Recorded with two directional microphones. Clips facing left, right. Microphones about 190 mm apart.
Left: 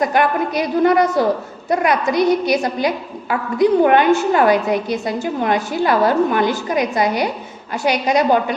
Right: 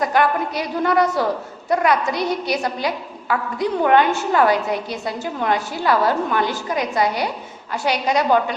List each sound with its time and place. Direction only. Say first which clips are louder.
0.0 s a woman's voice: left 2 dB; 15° left (ahead or behind)